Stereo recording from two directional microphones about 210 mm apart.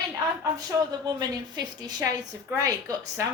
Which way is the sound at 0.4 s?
20° right (ahead or behind).